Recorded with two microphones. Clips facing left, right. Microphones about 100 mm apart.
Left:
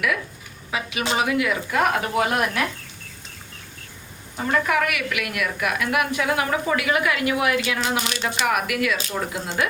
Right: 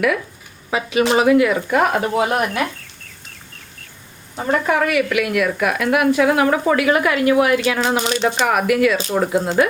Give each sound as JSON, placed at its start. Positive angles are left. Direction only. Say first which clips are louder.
{"t": 0.7, "sound": "speech", "louder": "right 8 dB", "side_deg": -35}
{"t": 1.8, "sound": "speech", "louder": "right 1 dB", "side_deg": -25}
{"t": 4.4, "sound": "speech", "louder": "right 4 dB", "side_deg": -30}